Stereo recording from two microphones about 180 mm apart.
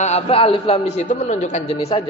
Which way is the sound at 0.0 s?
35° left (ahead or behind).